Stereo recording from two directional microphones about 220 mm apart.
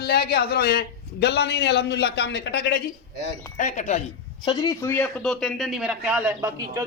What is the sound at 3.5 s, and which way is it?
Speech, 35° left (ahead or behind).